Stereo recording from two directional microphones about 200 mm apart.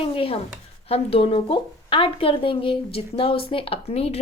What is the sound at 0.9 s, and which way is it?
A woman's voice, 30° left (ahead or behind).